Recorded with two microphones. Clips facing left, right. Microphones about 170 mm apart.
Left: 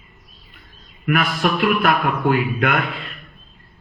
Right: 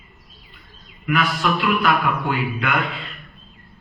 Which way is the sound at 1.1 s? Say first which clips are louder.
Left 1 dB; 50° left (ahead or behind).